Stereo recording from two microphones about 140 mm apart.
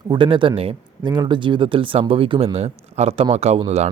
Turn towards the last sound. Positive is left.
turn(degrees=-50)  # may be behind; listen again after turning